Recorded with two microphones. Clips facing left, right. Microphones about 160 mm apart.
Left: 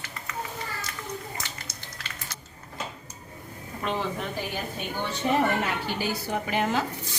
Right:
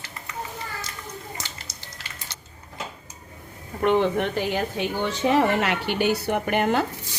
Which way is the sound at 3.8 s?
65° right (ahead or behind).